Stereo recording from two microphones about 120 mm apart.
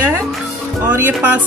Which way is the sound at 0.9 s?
15° right (ahead or behind).